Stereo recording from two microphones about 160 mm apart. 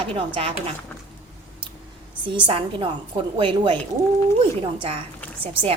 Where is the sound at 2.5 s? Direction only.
35° right (ahead or behind).